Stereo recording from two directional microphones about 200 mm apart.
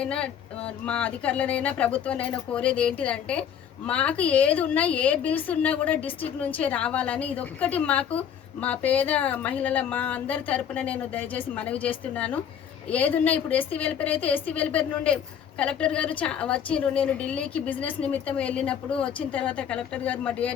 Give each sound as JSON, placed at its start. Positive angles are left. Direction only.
{"t": 0.0, "sound": "a woman's voice", "side_deg": 5}